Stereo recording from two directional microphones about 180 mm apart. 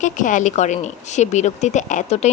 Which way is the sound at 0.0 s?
45° left (ahead or behind).